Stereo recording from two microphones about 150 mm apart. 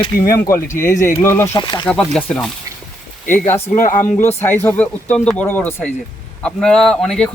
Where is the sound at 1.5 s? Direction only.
30° left (ahead or behind).